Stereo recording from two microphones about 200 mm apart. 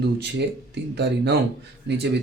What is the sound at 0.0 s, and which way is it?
Speech, 55° right (ahead or behind).